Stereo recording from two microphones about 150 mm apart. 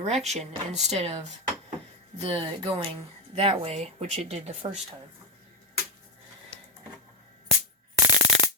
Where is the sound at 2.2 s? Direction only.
35° right (ahead or behind).